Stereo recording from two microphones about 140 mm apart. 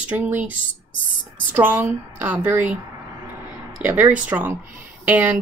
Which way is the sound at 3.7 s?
10° right (ahead or behind).